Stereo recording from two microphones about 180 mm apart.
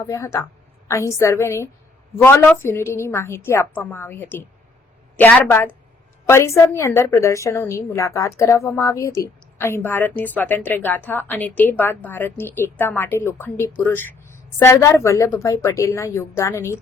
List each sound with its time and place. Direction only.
0.0 s a woman's voice: 15° left (ahead or behind)